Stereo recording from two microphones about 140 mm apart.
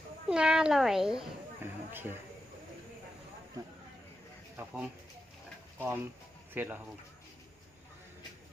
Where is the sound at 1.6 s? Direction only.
15° right (ahead or behind).